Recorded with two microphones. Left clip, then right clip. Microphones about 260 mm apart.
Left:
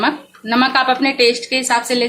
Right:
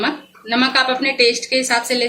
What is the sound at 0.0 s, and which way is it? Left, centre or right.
Speech, centre.